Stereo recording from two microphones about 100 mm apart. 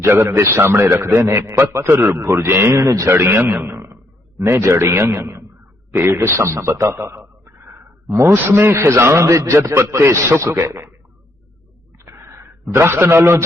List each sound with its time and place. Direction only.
0.0 s a man's voice: 25° right (ahead or behind)
11.9 s wheeze: 25° right (ahead or behind)
12.7 s a man's voice: 25° right (ahead or behind)